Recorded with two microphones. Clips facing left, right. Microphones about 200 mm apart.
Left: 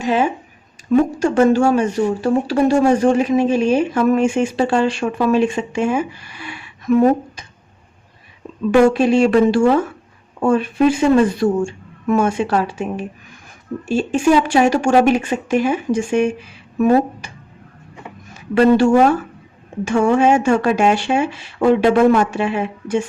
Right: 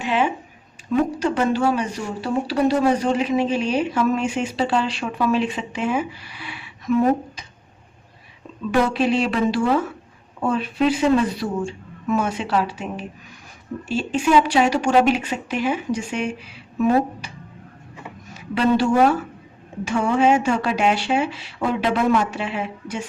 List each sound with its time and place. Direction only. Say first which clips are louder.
0.0 s speech: left 4 dB; 40° left (ahead or behind)
8.8 s speech: left 7 dB; 50° left (ahead or behind)
18.5 s speech: left 6 dB; 50° left (ahead or behind)